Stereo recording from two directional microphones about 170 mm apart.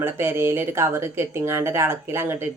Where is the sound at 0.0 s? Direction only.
15° right (ahead or behind).